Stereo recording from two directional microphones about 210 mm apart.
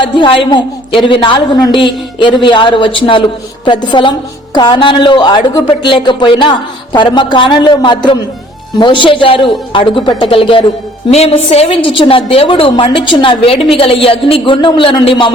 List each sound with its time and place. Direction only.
0.0 s speech: 25° left (ahead or behind)